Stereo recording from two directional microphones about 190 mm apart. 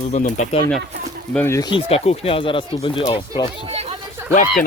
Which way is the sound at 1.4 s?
15° left (ahead or behind).